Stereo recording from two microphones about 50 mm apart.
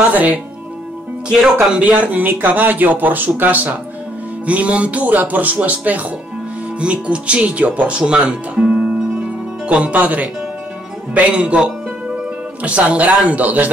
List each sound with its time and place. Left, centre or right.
0.1 s speech: right
1.3 s speech: centre
1.8 s speech: right
4.5 s speech: right
12.6 s speech: right